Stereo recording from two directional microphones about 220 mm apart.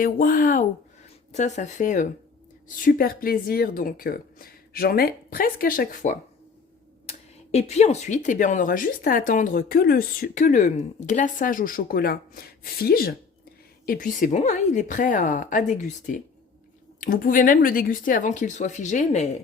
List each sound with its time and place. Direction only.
0.0 s speech: 40° left (ahead or behind)